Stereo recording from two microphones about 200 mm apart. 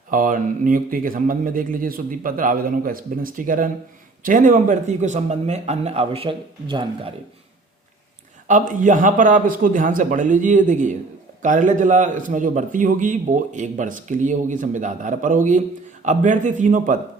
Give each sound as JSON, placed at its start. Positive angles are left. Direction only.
{"t": 0.1, "sound": "a man's voice", "side_deg": -45}
{"t": 8.4, "sound": "a man's voice", "side_deg": -40}